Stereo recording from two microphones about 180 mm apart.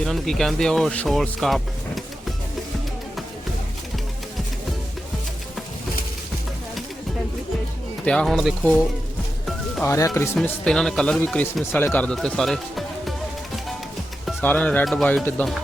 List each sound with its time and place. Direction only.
0.0 s speech: centre (ahead or behind)
8.0 s speech: 5° left (ahead or behind)
9.8 s speech: 15° left (ahead or behind)
10.3 s speech: 5° left (ahead or behind)
14.4 s speech: 5° left (ahead or behind)